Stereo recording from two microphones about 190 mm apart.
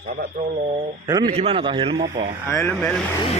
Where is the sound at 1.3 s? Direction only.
30° right (ahead or behind).